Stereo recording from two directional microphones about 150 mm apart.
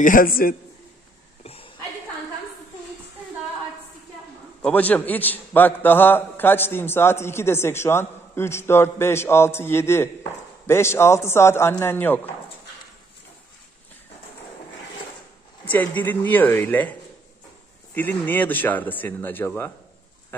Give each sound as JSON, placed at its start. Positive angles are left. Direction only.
{"t": 0.0, "sound": "a man's voice", "side_deg": 65}
{"t": 1.4, "sound": "cough", "side_deg": 40}
{"t": 4.6, "sound": "a man's voice", "side_deg": 10}
{"t": 15.7, "sound": "a man's voice", "side_deg": 10}
{"t": 17.9, "sound": "a man's voice", "side_deg": 10}